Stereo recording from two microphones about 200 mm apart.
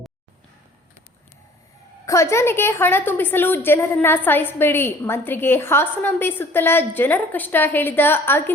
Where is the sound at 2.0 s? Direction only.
15° left (ahead or behind).